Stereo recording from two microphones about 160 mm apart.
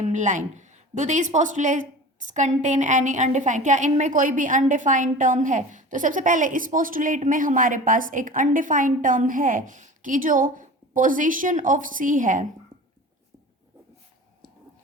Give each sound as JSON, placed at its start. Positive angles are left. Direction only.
{"t": 0.0, "sound": "speech", "side_deg": -50}